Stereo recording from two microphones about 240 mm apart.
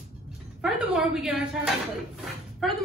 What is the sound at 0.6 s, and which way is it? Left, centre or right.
A woman's voice, centre.